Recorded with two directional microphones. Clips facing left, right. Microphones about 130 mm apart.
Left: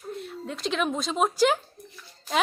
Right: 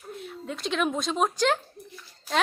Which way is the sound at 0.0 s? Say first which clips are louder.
Left 3 dB; centre (ahead or behind).